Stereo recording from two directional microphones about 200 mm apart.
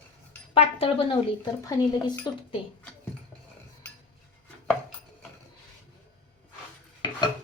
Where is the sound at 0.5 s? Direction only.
30° left (ahead or behind).